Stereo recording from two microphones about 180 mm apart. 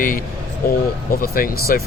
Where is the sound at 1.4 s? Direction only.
50° left (ahead or behind).